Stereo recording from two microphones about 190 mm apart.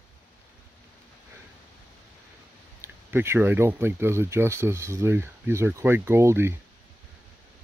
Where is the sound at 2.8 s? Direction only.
15° right (ahead or behind).